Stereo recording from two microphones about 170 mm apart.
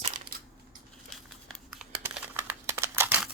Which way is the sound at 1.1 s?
Centre (ahead or behind).